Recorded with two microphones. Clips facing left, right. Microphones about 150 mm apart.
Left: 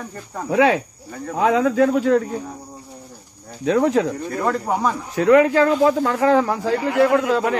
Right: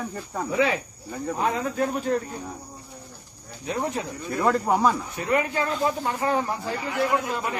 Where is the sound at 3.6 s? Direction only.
90° left.